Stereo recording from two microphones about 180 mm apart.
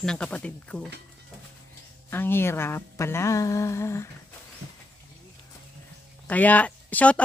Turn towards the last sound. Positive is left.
turn(degrees=5)  # may be behind; listen again after turning